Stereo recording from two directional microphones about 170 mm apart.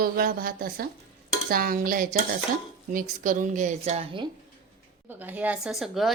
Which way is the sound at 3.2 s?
50° right (ahead or behind).